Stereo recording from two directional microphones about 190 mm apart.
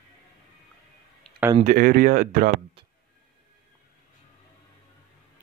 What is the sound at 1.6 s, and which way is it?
Speech, 45° right (ahead or behind).